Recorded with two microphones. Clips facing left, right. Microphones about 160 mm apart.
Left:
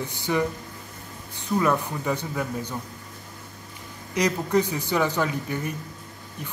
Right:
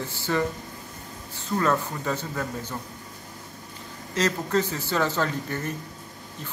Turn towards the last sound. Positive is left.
turn(degrees=10)  # may be behind; listen again after turning